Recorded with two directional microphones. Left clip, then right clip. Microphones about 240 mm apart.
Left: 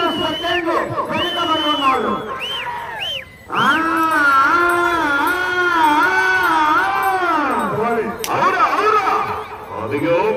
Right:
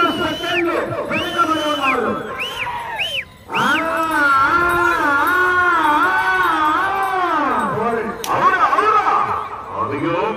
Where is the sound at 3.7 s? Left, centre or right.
Left.